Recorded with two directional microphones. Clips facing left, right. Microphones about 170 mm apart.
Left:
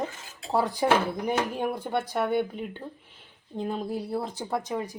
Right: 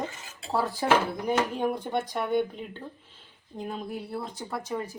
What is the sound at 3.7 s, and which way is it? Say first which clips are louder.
Speech: left 4 dB; 30° left (ahead or behind).